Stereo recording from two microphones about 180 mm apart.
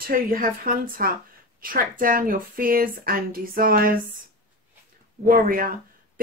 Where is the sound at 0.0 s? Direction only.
50° right (ahead or behind).